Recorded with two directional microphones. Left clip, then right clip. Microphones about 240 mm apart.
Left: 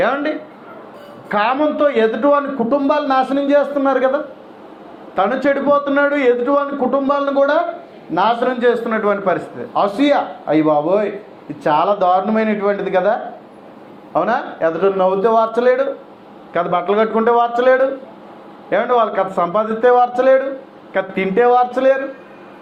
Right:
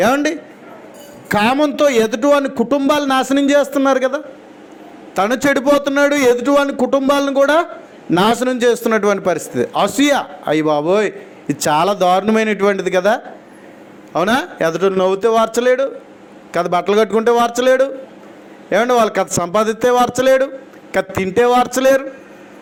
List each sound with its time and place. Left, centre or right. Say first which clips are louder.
0.0 s a man's voice: right 2 dB; right